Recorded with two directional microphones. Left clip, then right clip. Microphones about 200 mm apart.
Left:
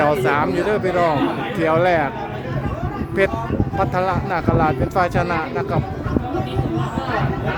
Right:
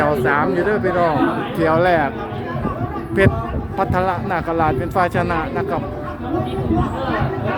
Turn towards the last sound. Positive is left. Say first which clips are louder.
# right 1 dB
turn(degrees=-5)  # may be behind; listen again after turning